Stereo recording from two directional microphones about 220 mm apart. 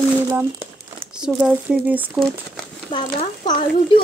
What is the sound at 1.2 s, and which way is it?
Speech, 5° right (ahead or behind).